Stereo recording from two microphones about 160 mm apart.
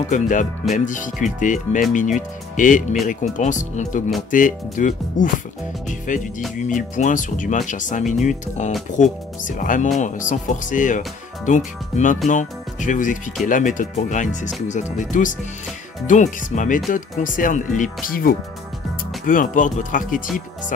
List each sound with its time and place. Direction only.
0.1 s speech: 50° left (ahead or behind)